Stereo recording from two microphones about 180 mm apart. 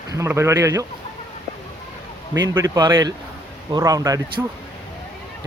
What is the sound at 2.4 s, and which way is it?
Speech, 20° right (ahead or behind).